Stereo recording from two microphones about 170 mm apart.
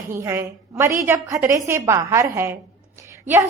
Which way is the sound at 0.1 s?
15° right (ahead or behind).